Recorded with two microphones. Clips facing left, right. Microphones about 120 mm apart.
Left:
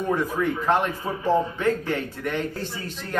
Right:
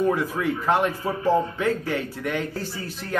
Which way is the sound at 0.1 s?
10° right (ahead or behind).